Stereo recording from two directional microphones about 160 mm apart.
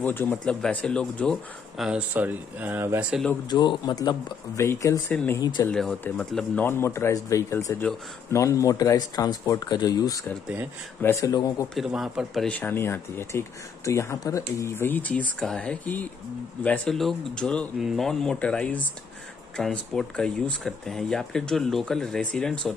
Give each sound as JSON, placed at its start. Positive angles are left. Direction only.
{"t": 0.0, "sound": "speech", "side_deg": 10}
{"t": 3.4, "sound": "speech", "side_deg": 25}
{"t": 5.4, "sound": "speech", "side_deg": 25}
{"t": 5.7, "sound": "speech", "side_deg": 5}
{"t": 11.7, "sound": "speech", "side_deg": 0}